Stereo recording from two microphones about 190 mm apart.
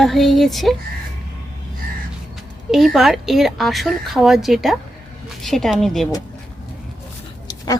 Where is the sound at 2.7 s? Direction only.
Centre (ahead or behind).